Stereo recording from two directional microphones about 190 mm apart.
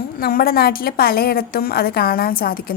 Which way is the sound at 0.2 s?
50° left (ahead or behind).